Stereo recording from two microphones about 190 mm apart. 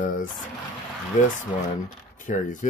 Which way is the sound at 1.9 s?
45° left (ahead or behind).